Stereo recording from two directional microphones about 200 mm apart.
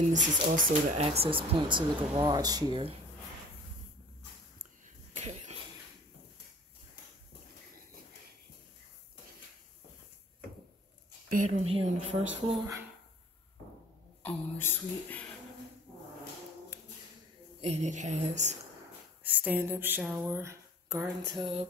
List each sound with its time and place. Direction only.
0.0 s speech: 35° right (ahead or behind); by 2.9 s 20° right (ahead or behind)
4.6 s a sound: 35° right (ahead or behind)
11.5 s a woman's voice: 30° right (ahead or behind)
14.2 s speech: 10° left (ahead or behind)
16.7 s a sound: 15° right (ahead or behind)
17.6 s a woman's voice: 35° right (ahead or behind)
19.2 s speech: 10° right (ahead or behind)
21.4 s speech: 30° right (ahead or behind)